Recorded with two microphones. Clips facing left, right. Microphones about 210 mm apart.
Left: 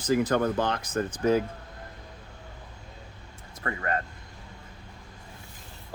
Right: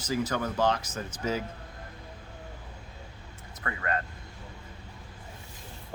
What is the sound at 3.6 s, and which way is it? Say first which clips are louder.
Speech: left 2 dB; 35° left (ahead or behind).